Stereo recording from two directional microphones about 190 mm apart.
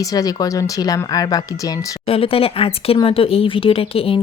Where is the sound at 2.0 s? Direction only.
30° left (ahead or behind).